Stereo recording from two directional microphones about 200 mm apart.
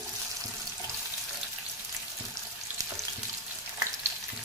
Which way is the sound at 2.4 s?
15° right (ahead or behind).